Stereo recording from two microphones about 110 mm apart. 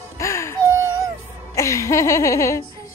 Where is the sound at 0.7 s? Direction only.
25° right (ahead or behind).